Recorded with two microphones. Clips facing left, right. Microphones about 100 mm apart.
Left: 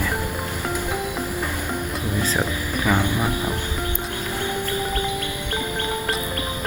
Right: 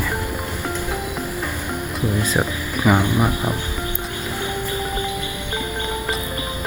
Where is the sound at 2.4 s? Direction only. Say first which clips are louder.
Right 3 dB; 20° right (ahead or behind).